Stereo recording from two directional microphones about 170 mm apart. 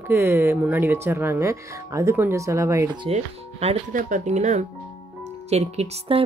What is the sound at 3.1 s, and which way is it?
A woman's voice, 40° right (ahead or behind).